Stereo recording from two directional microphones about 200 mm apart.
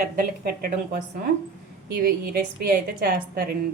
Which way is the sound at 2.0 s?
50° right (ahead or behind).